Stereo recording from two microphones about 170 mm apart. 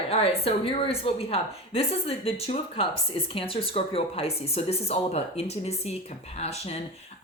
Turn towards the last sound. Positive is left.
turn(degrees=40)  # may be behind; listen again after turning